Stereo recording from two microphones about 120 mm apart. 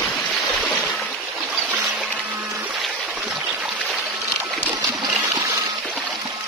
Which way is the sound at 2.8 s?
5° right (ahead or behind).